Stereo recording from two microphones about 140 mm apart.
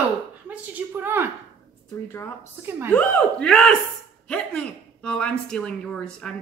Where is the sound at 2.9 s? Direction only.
10° left (ahead or behind).